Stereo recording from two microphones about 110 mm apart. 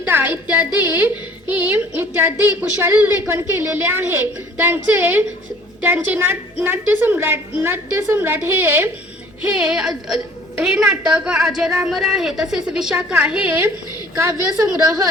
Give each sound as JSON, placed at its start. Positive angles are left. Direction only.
{"t": 0.0, "sound": "a woman's voice", "side_deg": -20}
{"t": 9.6, "sound": "a woman's voice", "side_deg": -5}
{"t": 14.2, "sound": "a woman's voice", "side_deg": -30}